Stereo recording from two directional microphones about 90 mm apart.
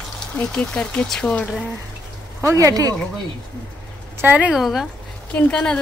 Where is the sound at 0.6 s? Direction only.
10° left (ahead or behind).